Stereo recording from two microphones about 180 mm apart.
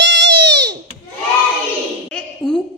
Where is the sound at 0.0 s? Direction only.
75° right (ahead or behind).